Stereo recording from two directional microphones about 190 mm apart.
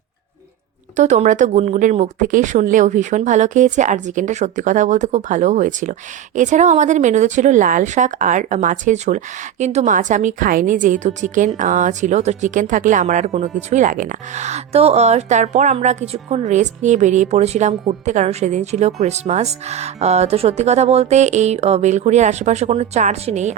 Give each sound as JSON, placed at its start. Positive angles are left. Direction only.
{"t": 0.9, "sound": "speech", "side_deg": -40}